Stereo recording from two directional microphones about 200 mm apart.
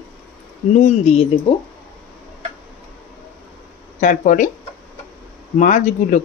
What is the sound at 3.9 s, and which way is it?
Speech, 40° left (ahead or behind).